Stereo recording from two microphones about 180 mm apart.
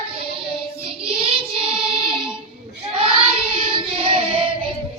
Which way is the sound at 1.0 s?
30° right (ahead or behind).